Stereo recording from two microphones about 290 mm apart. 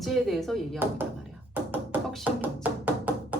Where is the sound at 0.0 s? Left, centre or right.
Centre.